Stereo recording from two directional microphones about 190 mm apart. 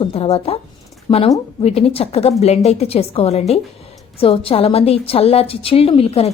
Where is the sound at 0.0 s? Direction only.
30° left (ahead or behind).